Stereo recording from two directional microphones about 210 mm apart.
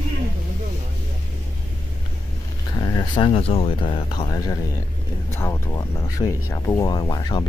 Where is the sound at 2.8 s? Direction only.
20° left (ahead or behind).